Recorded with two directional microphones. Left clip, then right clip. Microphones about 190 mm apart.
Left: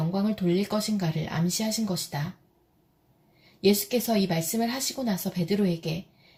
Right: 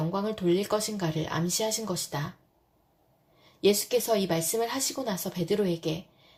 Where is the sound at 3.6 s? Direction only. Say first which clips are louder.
Even; 35° right (ahead or behind).